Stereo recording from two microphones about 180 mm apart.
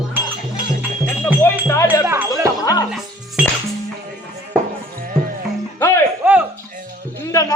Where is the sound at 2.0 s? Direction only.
10° right (ahead or behind).